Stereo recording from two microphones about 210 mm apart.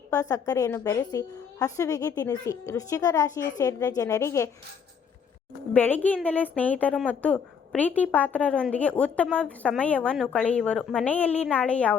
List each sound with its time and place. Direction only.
0.1 s a woman's voice: 15° left (ahead or behind)
5.7 s a woman's voice: 10° left (ahead or behind)